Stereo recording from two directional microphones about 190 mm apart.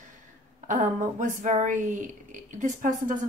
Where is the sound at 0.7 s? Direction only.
40° right (ahead or behind).